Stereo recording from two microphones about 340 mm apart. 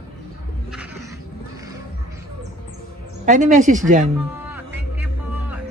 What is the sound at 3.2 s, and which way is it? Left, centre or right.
Speech, right.